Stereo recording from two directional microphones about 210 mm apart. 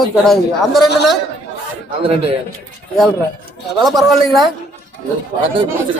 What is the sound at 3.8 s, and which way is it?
Speech, centre (ahead or behind).